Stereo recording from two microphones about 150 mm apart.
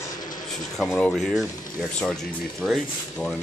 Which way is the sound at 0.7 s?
5° left (ahead or behind).